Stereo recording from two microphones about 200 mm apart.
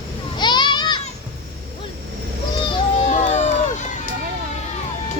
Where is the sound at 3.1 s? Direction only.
35° left (ahead or behind).